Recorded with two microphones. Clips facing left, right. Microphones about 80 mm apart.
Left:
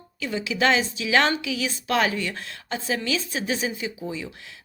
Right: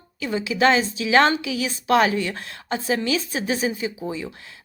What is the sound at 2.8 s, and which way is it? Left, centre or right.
Speech, centre.